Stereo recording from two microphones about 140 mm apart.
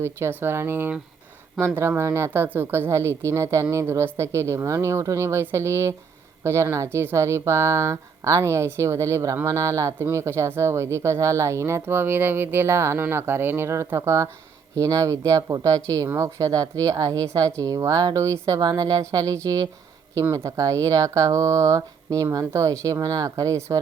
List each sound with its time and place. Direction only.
0.0 s speech: 15° right (ahead or behind)